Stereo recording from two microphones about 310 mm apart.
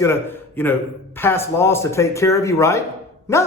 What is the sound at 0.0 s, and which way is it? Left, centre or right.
A man's voice, centre.